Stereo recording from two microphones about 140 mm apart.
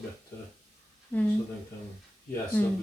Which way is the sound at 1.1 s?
15° left (ahead or behind).